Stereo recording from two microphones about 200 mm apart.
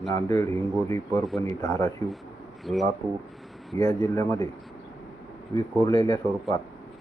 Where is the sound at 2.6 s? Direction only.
Centre (ahead or behind).